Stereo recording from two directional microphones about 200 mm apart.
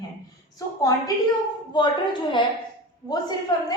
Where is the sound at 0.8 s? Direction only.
20° left (ahead or behind).